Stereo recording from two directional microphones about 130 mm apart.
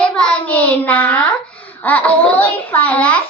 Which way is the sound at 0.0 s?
10° left (ahead or behind).